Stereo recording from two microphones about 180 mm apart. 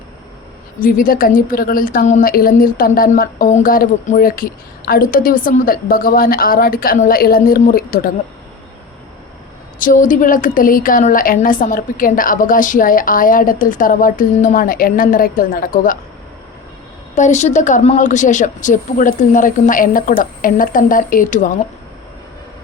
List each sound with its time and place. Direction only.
0.8 s a woman's voice: 50° left (ahead or behind)
9.7 s a woman's voice: 50° left (ahead or behind)
17.2 s a woman's voice: 40° left (ahead or behind)